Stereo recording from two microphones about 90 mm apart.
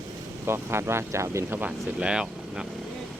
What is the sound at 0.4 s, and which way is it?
Speech, 25° right (ahead or behind).